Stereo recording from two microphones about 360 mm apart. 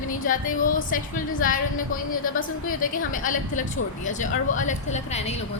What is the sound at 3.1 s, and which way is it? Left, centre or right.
A woman's voice, left.